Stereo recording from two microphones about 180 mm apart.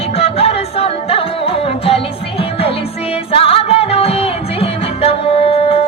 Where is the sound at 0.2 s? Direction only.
35° left (ahead or behind).